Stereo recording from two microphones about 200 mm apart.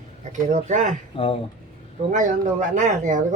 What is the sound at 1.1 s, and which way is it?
Speech, 30° left (ahead or behind).